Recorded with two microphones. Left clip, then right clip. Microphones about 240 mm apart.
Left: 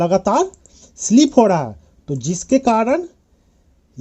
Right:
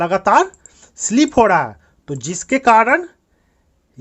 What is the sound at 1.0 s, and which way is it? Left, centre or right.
Speech, centre.